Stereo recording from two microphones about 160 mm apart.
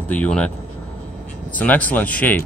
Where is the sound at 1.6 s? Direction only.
10° left (ahead or behind).